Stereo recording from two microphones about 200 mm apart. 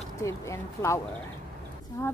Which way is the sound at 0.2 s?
15° left (ahead or behind).